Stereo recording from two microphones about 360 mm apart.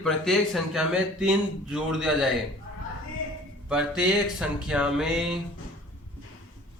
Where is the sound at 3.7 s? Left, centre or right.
Centre.